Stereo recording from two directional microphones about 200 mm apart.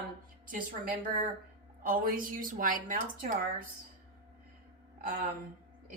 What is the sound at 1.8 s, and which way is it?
A woman's voice, 45° right (ahead or behind).